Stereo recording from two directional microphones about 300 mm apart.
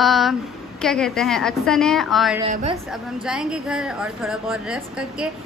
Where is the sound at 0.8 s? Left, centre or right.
Centre.